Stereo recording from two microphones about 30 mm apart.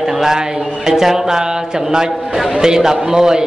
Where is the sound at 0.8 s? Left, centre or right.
Centre.